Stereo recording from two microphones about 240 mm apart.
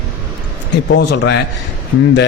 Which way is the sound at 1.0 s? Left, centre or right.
Left.